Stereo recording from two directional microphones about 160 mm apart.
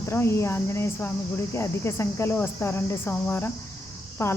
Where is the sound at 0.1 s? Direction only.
15° left (ahead or behind).